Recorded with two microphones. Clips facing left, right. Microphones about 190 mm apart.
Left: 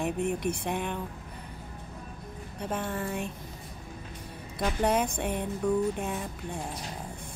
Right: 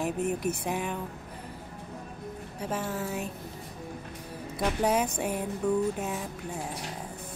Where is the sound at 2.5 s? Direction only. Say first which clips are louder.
Even; 5° right (ahead or behind).